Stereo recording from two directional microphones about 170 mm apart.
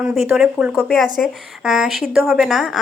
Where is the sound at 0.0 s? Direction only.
Centre (ahead or behind).